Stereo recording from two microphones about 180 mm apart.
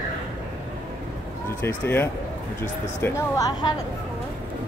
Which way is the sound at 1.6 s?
10° left (ahead or behind).